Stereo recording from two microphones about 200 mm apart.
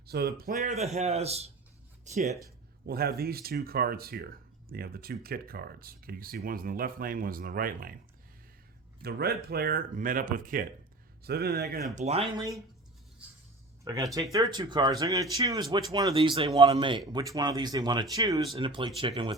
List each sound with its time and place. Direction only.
0.1 s speech: 50° right (ahead or behind)
2.8 s speech: 50° right (ahead or behind)
9.0 s speech: 50° right (ahead or behind)
11.9 s speech: 30° right (ahead or behind)
13.8 s speech: 20° right (ahead or behind)